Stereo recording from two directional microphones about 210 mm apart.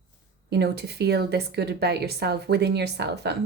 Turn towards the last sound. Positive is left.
turn(degrees=-50)  # may be behind; listen again after turning